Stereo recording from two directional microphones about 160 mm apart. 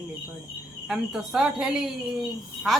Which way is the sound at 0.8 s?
5° right (ahead or behind).